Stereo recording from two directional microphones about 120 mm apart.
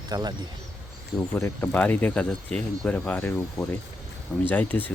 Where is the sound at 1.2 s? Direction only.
20° left (ahead or behind).